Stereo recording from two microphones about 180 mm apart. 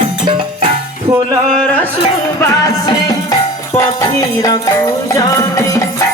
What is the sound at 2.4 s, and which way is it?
Music, 15° left (ahead or behind).